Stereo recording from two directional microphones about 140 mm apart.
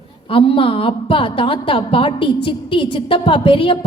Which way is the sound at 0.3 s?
40° left (ahead or behind).